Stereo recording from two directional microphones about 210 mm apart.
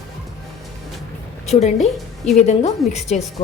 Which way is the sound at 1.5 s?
30° left (ahead or behind).